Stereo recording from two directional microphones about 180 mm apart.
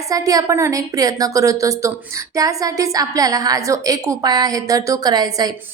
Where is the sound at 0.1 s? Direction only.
20° right (ahead or behind).